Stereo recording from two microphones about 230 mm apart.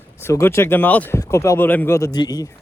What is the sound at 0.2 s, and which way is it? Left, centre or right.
Speech, centre.